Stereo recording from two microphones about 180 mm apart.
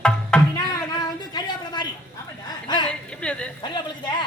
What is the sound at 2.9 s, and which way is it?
Speech, 5° left (ahead or behind).